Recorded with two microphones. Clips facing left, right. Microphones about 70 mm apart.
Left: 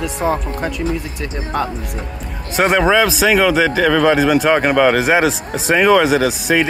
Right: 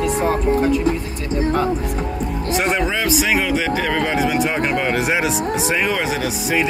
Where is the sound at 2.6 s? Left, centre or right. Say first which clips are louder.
Left 9 dB; left.